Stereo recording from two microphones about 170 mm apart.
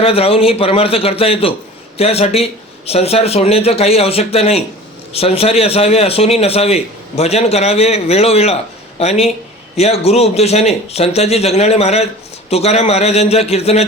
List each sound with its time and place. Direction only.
0.0 s a man's voice: 35° left (ahead or behind)